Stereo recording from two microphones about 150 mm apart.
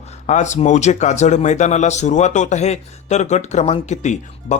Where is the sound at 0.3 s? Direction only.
50° left (ahead or behind).